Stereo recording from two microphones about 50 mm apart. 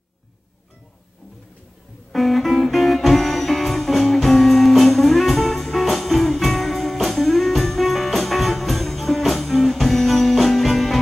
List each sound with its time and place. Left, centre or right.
2.1 s music: centre